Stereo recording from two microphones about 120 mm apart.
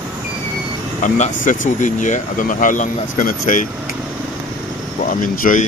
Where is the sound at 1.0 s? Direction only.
90° left.